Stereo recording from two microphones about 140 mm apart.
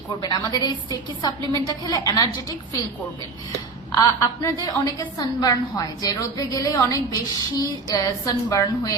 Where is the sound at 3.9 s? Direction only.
25° left (ahead or behind).